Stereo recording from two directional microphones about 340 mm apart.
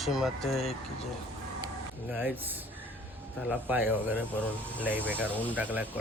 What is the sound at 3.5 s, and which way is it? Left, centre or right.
Speech, centre.